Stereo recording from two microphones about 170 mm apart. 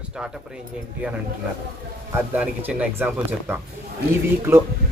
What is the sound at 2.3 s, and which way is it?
Speech, 10° right (ahead or behind).